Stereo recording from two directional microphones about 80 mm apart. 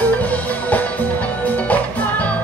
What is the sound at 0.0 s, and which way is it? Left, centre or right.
Music, centre.